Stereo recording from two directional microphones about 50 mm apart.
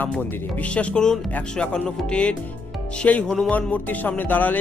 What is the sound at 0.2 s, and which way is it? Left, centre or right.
Speech, left.